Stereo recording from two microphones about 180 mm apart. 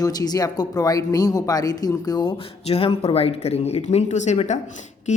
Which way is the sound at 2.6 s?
35° left (ahead or behind).